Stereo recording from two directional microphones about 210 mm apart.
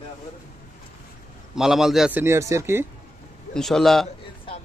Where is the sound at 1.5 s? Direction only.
Centre (ahead or behind).